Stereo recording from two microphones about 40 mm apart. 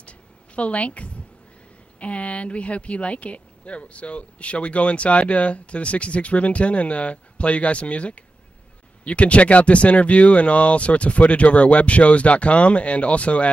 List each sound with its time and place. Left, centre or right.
0.6 s speech: left